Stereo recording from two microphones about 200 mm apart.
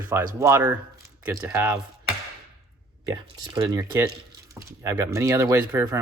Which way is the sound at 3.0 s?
20° right (ahead or behind).